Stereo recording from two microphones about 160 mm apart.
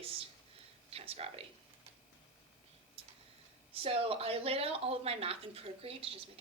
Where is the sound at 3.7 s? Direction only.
35° right (ahead or behind).